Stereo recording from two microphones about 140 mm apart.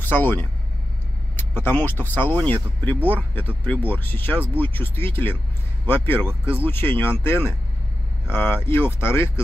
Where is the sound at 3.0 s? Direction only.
15° right (ahead or behind).